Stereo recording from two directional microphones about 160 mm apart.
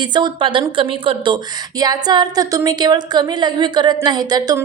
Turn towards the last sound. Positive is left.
turn(degrees=-25)  # may be behind; listen again after turning